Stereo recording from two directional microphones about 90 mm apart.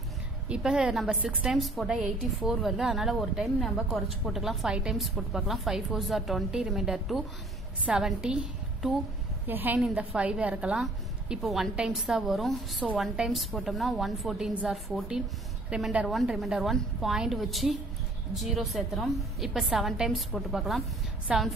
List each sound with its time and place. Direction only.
0.5 s a woman's voice: 10° right (ahead or behind)
9.5 s a woman's voice: 20° right (ahead or behind); by 14.5 s centre (ahead or behind)
14.6 s a woman's voice: 15° right (ahead or behind)
16.1 s a woman's voice: centre (ahead or behind)